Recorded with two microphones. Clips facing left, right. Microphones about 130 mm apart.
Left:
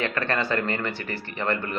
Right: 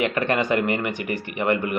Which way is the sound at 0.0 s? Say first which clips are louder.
Right 4 dB; 15° right (ahead or behind).